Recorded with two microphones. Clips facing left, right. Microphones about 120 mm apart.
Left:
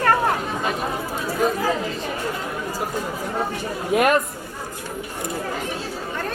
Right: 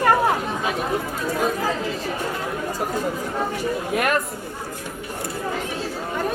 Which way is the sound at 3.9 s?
20° left (ahead or behind).